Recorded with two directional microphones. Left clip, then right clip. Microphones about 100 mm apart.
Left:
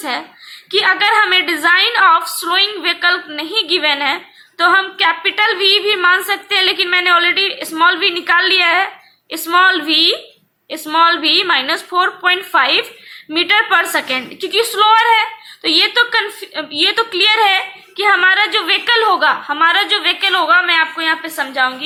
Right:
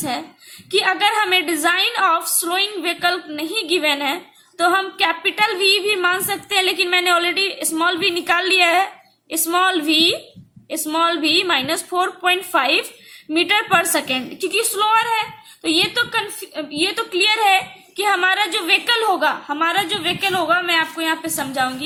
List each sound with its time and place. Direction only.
0.7 s a woman's voice: 40° right (ahead or behind)
17.9 s a woman's voice: 45° right (ahead or behind)
21.5 s a woman's voice: 70° right (ahead or behind)